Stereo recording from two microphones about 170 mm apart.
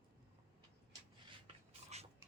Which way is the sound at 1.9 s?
40° right (ahead or behind).